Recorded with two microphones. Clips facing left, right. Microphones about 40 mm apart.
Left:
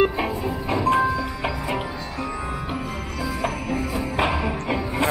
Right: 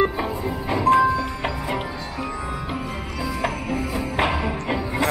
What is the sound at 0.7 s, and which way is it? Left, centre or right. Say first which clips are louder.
Music: right 3 dB; right.